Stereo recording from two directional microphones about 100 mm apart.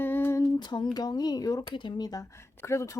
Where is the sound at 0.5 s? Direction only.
45° left (ahead or behind).